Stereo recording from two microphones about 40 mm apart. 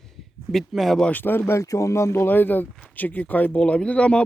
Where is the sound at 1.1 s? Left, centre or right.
Left.